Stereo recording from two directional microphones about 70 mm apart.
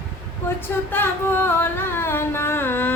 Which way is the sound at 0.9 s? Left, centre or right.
Left.